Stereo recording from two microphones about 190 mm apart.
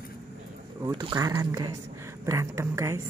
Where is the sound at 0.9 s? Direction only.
20° right (ahead or behind).